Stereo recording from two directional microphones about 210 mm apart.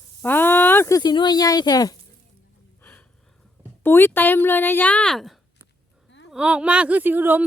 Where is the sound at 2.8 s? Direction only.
5° left (ahead or behind).